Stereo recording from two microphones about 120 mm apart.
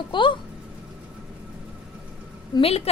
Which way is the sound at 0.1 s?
40° left (ahead or behind).